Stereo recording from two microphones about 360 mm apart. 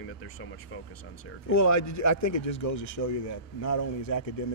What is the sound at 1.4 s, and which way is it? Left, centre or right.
Speech, left.